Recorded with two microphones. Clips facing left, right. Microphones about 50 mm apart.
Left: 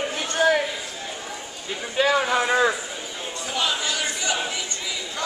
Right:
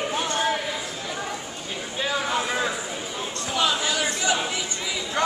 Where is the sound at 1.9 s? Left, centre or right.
Left.